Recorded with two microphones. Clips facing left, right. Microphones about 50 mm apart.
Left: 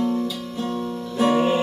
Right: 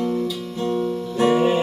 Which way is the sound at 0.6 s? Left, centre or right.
Centre.